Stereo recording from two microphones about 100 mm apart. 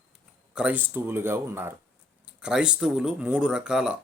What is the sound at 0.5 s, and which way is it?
Speech, 10° right (ahead or behind).